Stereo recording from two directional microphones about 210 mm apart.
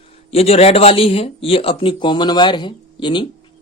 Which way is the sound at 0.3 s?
30° left (ahead or behind).